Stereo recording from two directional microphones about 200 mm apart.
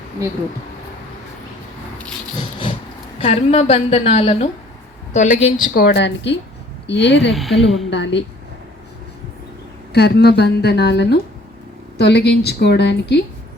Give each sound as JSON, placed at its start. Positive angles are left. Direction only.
{"t": 3.2, "sound": "a woman's voice", "side_deg": 30}
{"t": 5.7, "sound": "a woman's voice", "side_deg": 55}
{"t": 7.3, "sound": "a woman's voice", "side_deg": 0}
{"t": 7.9, "sound": "a woman's voice", "side_deg": 60}
{"t": 9.9, "sound": "a woman's voice", "side_deg": 55}